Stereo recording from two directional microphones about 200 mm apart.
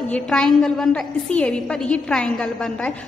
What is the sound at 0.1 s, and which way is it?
A woman's voice, 5° left (ahead or behind).